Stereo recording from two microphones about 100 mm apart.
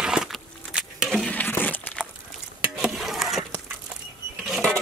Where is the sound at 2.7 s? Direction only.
5° right (ahead or behind).